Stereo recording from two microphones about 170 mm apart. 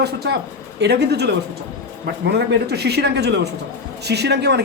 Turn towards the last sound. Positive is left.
turn(degrees=-80)